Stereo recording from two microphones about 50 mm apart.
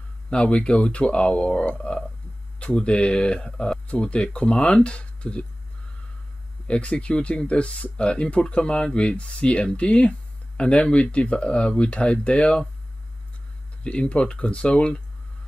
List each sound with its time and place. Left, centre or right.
0.3 s speech: centre
6.7 s speech: left
13.8 s speech: left